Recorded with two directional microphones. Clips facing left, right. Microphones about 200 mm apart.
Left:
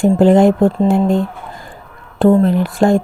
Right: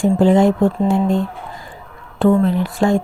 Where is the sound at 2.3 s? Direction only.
40° left (ahead or behind).